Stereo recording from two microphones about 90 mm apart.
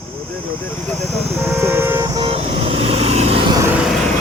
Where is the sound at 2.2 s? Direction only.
90° right.